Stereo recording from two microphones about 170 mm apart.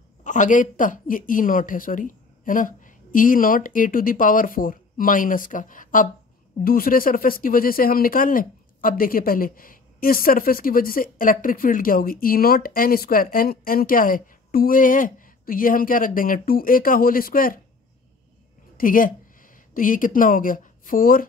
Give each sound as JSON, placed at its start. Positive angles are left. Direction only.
{"t": 0.2, "sound": "a woman's voice", "side_deg": 50}
{"t": 18.8, "sound": "speech", "side_deg": 55}